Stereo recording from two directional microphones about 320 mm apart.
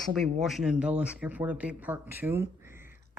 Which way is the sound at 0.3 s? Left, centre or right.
Centre.